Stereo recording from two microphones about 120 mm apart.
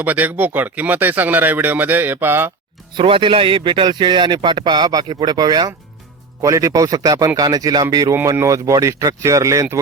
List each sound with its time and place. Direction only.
0.0 s speech: 15° right (ahead or behind)
3.0 s speech: 45° right (ahead or behind); by 9.8 s 25° right (ahead or behind)